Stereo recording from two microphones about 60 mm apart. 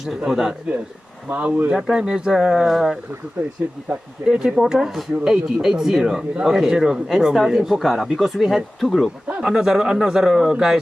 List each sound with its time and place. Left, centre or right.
0.2 s speech: centre
1.3 s speech: right
1.7 s speech: centre
3.4 s speech: right
3.8 s speech: centre
9.2 s speech: centre